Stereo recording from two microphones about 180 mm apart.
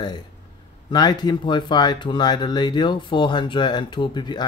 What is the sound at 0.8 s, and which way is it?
A man's voice, 25° left (ahead or behind).